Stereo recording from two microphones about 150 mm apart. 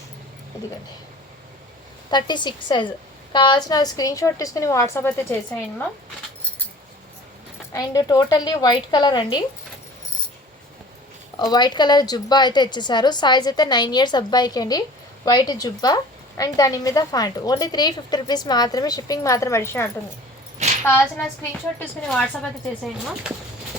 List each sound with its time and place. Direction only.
2.0 s a woman's voice: 30° left (ahead or behind)
7.7 s a woman's voice: 25° left (ahead or behind)
11.3 s a woman's voice: 30° left (ahead or behind)
20.6 s a sound: 50° right (ahead or behind)
21.8 s a woman's voice: 5° left (ahead or behind)